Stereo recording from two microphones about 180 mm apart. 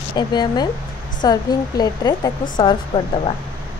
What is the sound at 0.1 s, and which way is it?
Speech, 25° left (ahead or behind).